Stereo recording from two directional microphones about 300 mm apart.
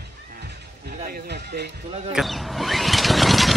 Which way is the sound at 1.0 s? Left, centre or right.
Right.